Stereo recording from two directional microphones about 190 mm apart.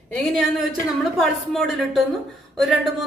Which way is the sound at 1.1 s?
Centre (ahead or behind).